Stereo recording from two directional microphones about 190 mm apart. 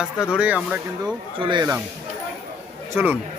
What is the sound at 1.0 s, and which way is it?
Speech, 25° right (ahead or behind).